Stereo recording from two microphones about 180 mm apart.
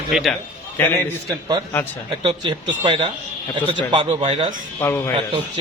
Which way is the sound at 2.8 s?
25° right (ahead or behind).